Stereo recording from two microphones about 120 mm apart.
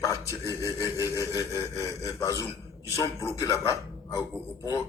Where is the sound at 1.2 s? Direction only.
25° left (ahead or behind).